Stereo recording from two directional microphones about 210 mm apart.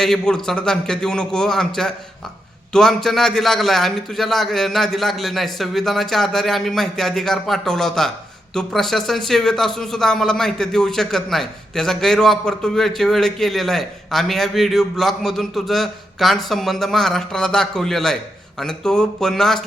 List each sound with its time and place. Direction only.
0.0 s speech: centre (ahead or behind)